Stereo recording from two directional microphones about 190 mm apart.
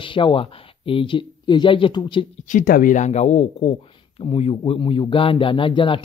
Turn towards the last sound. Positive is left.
turn(degrees=25)  # may be behind; listen again after turning